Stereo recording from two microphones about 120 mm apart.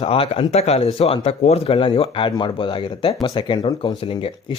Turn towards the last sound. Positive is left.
turn(degrees=50)  # may be behind; listen again after turning